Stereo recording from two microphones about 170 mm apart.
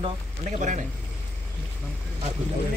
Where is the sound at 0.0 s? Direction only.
45° right (ahead or behind).